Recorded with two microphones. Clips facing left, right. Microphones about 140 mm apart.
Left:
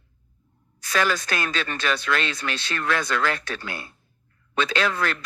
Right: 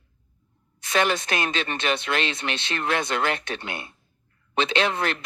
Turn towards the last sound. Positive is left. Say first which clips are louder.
# right 1 dB
turn(degrees=-25)  # may be behind; listen again after turning